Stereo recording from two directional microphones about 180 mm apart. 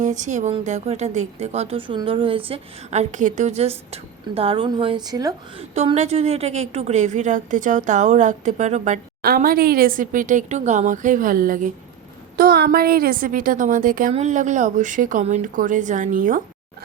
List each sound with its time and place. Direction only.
0.0 s a woman's voice: 45° right (ahead or behind); by 5.6 s 20° right (ahead or behind)
5.7 s a woman's voice: 35° right (ahead or behind)
14.1 s a woman's voice: 40° right (ahead or behind)